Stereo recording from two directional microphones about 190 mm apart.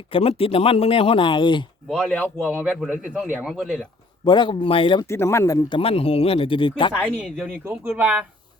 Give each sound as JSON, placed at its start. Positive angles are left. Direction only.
{"t": 0.1, "sound": "speech", "side_deg": 30}
{"t": 1.9, "sound": "a man's voice", "side_deg": 0}
{"t": 4.3, "sound": "speech", "side_deg": 25}
{"t": 5.0, "sound": "speech", "side_deg": 15}
{"t": 7.6, "sound": "speech", "side_deg": -10}